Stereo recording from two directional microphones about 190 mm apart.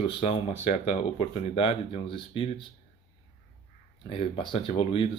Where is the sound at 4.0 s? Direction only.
25° left (ahead or behind).